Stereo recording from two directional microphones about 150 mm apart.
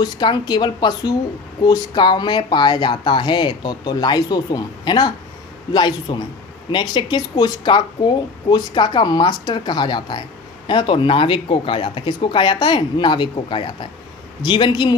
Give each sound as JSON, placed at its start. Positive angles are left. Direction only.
{"t": 0.0, "sound": "speech", "side_deg": 30}